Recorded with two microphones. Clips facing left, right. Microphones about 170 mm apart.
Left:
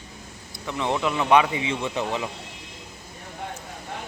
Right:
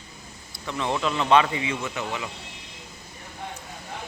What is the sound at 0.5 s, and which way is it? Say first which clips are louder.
Speech: left 1 dB; 15° left (ahead or behind).